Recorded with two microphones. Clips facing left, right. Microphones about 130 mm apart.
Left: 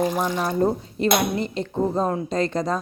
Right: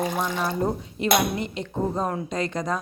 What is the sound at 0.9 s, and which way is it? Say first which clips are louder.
Speech: right 1 dB; 40° left (ahead or behind).